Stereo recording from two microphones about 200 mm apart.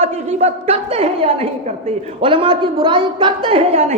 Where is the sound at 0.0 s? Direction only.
30° right (ahead or behind).